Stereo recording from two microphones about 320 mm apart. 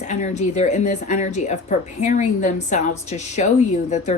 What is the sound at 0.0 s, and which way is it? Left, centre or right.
A woman's voice, left.